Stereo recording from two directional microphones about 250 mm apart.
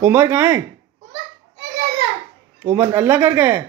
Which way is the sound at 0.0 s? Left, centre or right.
Centre.